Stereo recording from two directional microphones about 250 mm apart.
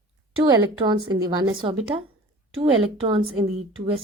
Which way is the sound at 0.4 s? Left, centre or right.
Centre.